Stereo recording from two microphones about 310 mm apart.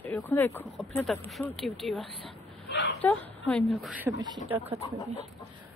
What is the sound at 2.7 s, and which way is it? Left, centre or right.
Speech, left.